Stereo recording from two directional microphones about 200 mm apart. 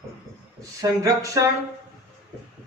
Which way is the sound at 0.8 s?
15° right (ahead or behind).